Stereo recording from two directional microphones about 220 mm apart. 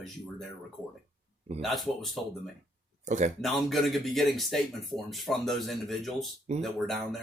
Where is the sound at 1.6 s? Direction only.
Centre (ahead or behind).